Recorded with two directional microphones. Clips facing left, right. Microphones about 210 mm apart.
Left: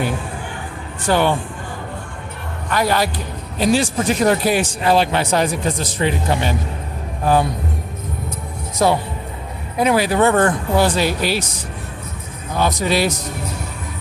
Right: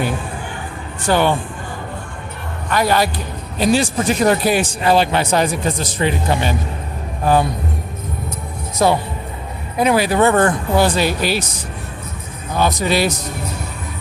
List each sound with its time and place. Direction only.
1.0 s speech: 20° right (ahead or behind)
2.7 s speech: 15° right (ahead or behind)
8.8 s speech: 20° right (ahead or behind)
12.5 s speech: 20° right (ahead or behind)